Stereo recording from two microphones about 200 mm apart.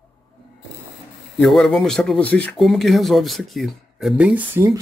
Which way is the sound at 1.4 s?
Centre (ahead or behind).